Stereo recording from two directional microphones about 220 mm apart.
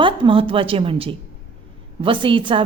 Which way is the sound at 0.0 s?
25° right (ahead or behind).